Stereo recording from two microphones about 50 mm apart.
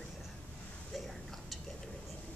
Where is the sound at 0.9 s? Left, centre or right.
Centre.